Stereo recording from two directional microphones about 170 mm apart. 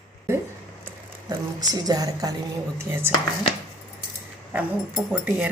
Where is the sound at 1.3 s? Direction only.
20° right (ahead or behind).